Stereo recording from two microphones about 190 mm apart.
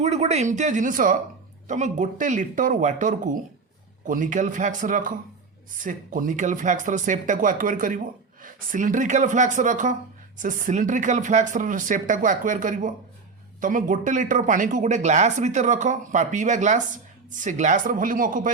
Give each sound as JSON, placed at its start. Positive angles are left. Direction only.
{"t": 0.0, "sound": "speech", "side_deg": -35}